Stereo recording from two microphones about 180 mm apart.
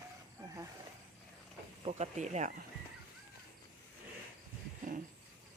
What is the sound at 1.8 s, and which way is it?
Speech, 40° right (ahead or behind).